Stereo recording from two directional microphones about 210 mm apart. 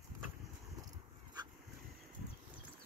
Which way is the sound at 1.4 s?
20° right (ahead or behind).